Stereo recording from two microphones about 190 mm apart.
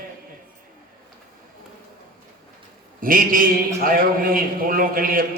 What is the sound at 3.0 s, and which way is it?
A man's voice, 50° right (ahead or behind).